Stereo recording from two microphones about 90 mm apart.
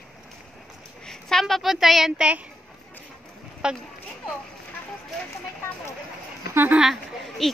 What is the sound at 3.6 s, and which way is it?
Speech, 10° right (ahead or behind).